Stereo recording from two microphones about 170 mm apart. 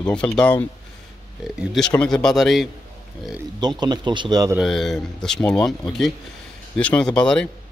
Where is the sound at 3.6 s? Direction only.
25° right (ahead or behind).